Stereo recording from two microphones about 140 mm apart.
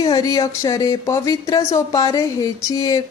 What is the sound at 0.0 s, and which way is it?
Speech, 25° left (ahead or behind).